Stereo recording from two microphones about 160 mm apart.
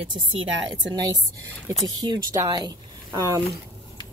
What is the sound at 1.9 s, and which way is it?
Speech, 25° right (ahead or behind).